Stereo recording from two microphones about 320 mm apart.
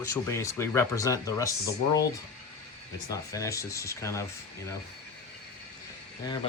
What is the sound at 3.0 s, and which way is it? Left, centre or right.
Speech, centre.